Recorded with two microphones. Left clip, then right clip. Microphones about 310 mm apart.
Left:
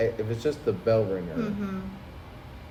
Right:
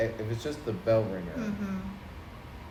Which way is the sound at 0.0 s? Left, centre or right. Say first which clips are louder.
Left 5 dB; left.